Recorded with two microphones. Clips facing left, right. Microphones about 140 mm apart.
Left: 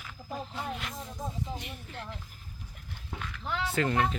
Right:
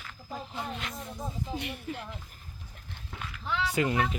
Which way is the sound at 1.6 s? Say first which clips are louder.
Right 6 dB; 70° right (ahead or behind).